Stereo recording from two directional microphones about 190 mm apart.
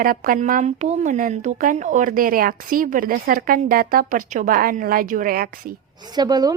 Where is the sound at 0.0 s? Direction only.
50° right (ahead or behind).